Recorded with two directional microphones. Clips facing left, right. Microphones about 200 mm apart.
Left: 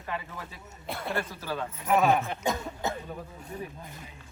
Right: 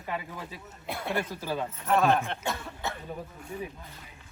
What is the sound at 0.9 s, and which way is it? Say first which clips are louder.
Speech: right 1 dB; centre (ahead or behind).